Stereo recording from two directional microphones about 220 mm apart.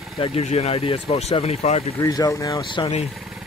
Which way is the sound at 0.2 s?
30° left (ahead or behind).